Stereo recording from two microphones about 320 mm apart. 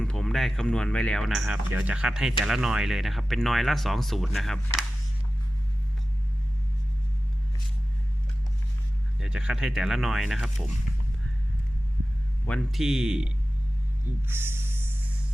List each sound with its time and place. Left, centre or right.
0.0 s speech: centre
9.2 s speech: centre
12.5 s speech: centre
14.3 s music: centre